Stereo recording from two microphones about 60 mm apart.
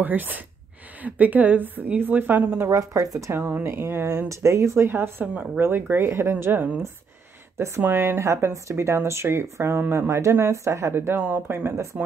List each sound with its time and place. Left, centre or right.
0.0 s a woman's voice: right
2.7 s speech: right
3.3 s a woman's voice: right
4.8 s a woman's voice: right
5.3 s speech: right
5.6 s a woman's voice: right
7.5 s speech: right
7.8 s a woman's voice: right
8.2 s a woman's voice: right